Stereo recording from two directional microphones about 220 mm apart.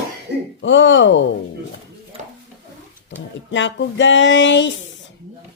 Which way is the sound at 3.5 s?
55° left (ahead or behind).